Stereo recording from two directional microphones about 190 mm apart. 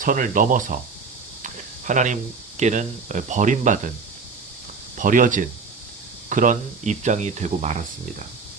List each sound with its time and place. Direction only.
0.0 s speech: 45° right (ahead or behind)
1.4 s a sound: 40° right (ahead or behind)
2.6 s speech: 40° right (ahead or behind)
4.9 s speech: 45° right (ahead or behind)